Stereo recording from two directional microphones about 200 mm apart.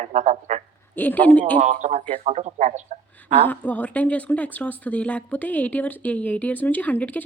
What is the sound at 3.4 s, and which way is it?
Speech, 10° left (ahead or behind).